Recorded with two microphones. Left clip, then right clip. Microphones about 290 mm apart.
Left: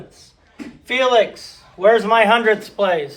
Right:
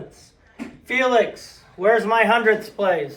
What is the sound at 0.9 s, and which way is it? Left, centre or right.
A man's voice, left.